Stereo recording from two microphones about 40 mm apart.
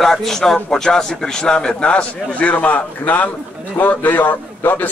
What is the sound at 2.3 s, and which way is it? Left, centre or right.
A man's voice, left.